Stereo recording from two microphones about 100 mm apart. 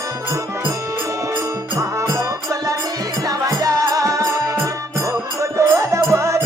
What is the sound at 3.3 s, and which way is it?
Music, 35° right (ahead or behind).